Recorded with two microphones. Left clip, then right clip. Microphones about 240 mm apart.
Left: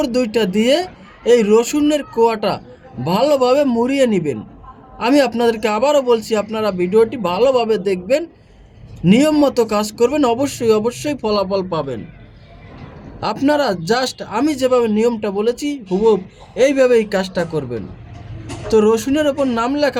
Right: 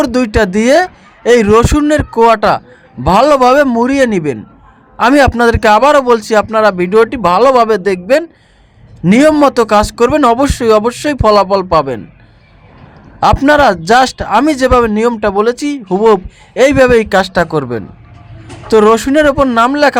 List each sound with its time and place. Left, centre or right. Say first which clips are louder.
0.0 s a man's voice: right 6 dB; right
13.1 s speech: right 9 dB; right